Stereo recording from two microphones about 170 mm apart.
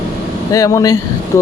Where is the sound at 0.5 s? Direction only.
20° left (ahead or behind).